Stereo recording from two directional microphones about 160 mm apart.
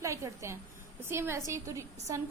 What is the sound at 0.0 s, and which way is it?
A woman's voice, 20° right (ahead or behind).